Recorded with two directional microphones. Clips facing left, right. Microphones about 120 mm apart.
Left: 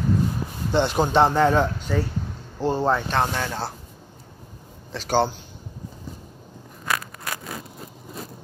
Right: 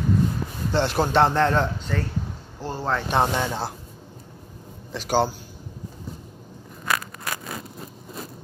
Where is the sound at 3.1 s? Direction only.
15° right (ahead or behind).